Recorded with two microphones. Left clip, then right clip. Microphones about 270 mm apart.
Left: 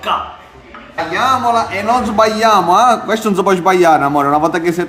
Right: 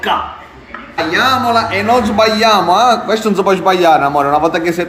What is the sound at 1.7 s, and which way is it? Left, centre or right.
A man's voice, left.